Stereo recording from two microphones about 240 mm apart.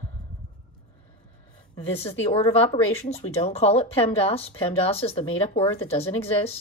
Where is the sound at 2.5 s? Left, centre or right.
Left.